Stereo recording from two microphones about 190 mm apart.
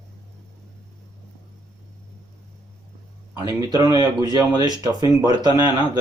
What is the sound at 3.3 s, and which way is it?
Speech, 20° right (ahead or behind).